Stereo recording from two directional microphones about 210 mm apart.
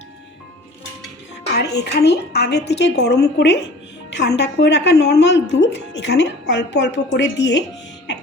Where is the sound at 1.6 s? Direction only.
55° left (ahead or behind).